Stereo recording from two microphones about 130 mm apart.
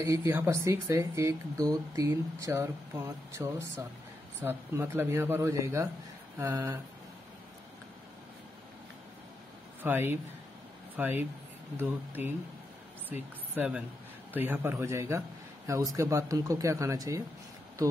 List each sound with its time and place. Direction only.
0.0 s speech: 25° right (ahead or behind)
9.8 s speech: 15° right (ahead or behind)
11.7 s a man's voice: 15° right (ahead or behind)